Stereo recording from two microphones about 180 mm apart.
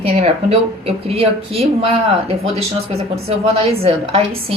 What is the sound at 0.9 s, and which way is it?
Speech, 35° right (ahead or behind).